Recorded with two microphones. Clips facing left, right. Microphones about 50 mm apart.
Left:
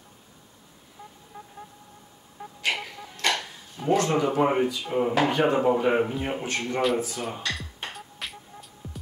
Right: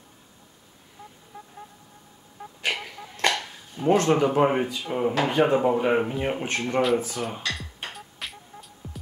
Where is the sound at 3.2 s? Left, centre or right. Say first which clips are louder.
Right 2 dB; right.